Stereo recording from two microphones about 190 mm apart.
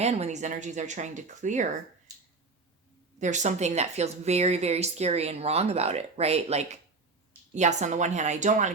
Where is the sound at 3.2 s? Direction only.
40° right (ahead or behind).